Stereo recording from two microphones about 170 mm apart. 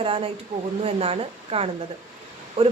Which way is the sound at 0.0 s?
35° right (ahead or behind).